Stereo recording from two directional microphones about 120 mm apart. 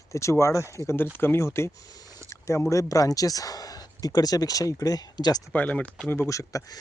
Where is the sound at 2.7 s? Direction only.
30° left (ahead or behind).